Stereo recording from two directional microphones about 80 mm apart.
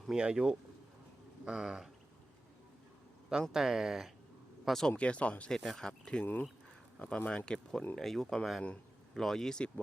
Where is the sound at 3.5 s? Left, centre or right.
Centre.